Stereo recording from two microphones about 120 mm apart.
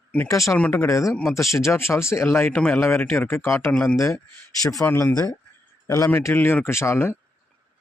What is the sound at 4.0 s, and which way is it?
Speech, 25° left (ahead or behind).